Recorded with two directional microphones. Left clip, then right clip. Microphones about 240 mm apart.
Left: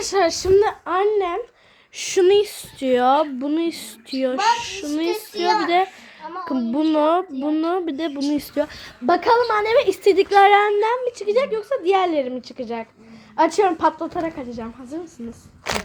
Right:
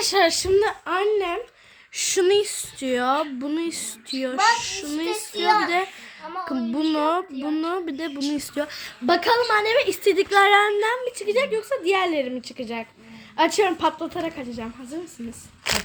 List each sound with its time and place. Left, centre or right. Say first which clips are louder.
0.0 s a woman's voice: even; centre
6.5 s a woman's voice: left 5 dB; centre
15.6 s ratchet: even; centre